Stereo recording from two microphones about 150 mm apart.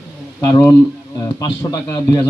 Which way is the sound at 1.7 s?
25° left (ahead or behind).